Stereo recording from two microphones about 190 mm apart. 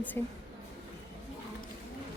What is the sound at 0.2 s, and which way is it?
Speech, 10° left (ahead or behind).